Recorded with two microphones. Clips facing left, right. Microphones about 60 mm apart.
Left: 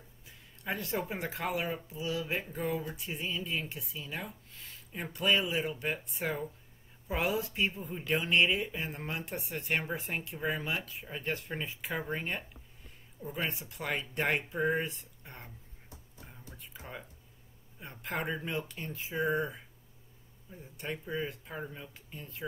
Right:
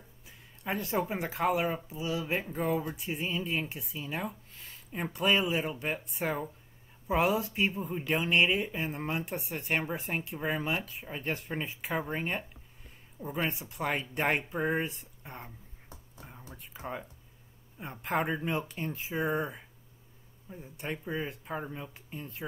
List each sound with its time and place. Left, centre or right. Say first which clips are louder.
0.7 s speech: right 3 dB; centre
16.7 s speech: right 7 dB; centre